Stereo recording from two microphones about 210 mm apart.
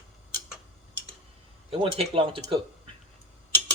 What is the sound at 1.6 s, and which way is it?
Speech, 25° right (ahead or behind).